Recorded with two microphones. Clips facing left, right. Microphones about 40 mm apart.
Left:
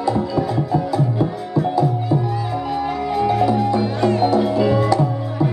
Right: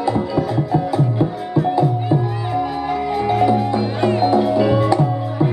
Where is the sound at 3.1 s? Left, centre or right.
Centre.